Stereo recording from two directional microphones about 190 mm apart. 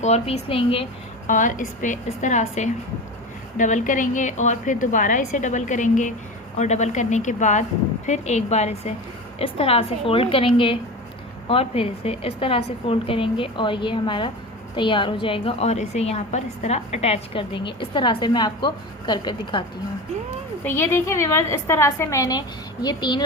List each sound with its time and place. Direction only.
0.0 s a woman's voice: 35° left (ahead or behind)
1.3 s a woman's voice: 40° left (ahead or behind); by 19.6 s 25° left (ahead or behind)
20.7 s a woman's voice: 10° left (ahead or behind)